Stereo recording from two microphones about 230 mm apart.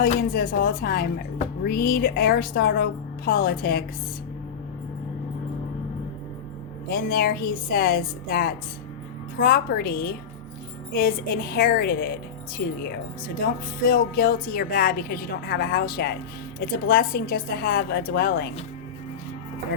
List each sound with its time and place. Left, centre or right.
0.0 s a woman's voice: left
6.9 s a woman's voice: left
11.5 s a woman's voice: left
13.4 s a woman's voice: left